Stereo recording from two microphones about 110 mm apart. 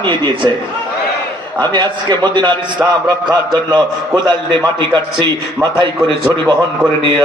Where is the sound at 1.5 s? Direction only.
45° right (ahead or behind).